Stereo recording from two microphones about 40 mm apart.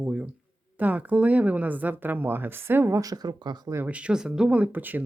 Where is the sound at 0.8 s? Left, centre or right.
Right.